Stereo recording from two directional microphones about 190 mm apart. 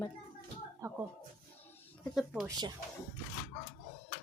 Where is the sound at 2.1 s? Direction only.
Centre (ahead or behind).